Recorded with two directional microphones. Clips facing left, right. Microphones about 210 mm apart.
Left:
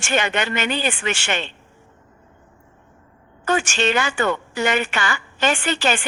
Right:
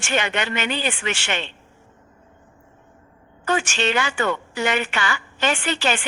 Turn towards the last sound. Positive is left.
turn(degrees=45)  # may be behind; listen again after turning